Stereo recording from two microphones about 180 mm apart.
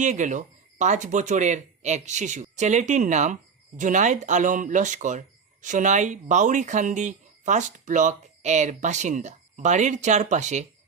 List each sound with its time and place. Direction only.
0.0 s speech: 45° right (ahead or behind)